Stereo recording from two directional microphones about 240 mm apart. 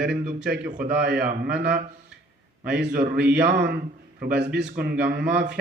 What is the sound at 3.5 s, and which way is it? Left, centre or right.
A man's voice, right.